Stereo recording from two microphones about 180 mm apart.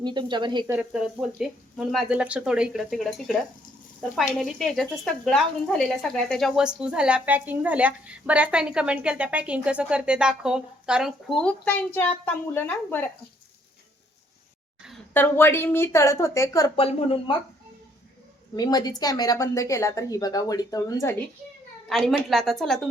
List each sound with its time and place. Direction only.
0.0 s speech: 25° right (ahead or behind)
0.7 s speech: 5° right (ahead or behind)
4.4 s speech: centre (ahead or behind)
15.1 s a woman's voice: 10° left (ahead or behind)
16.7 s speech: 30° left (ahead or behind)
18.5 s a woman's voice: 20° left (ahead or behind)
21.8 s speech: centre (ahead or behind)